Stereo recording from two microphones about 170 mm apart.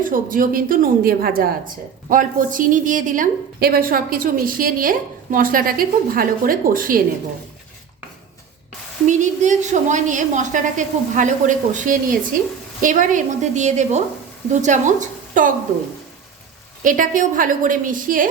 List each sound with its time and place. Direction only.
0.0 s a woman's voice: 55° right (ahead or behind)
9.0 s a woman's voice: 45° right (ahead or behind)
16.8 s a woman's voice: 50° right (ahead or behind)